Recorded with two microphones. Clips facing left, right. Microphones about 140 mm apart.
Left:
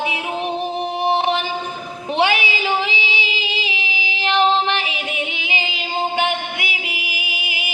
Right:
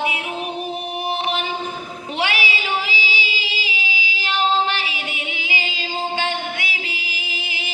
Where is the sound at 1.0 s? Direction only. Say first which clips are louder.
Left 6 dB; 30° left (ahead or behind).